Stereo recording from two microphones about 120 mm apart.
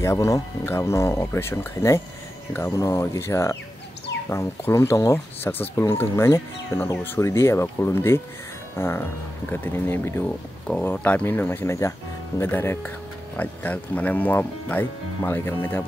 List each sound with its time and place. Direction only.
0.0 s speech: 25° left (ahead or behind)